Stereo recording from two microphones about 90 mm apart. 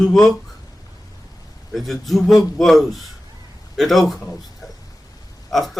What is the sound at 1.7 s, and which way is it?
Speech, centre (ahead or behind).